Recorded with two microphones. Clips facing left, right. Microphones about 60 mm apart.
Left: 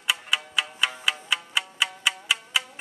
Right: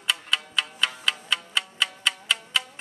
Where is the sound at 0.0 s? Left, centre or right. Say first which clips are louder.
Even; centre.